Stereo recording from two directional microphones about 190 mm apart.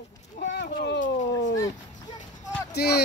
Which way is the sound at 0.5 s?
60° left (ahead or behind).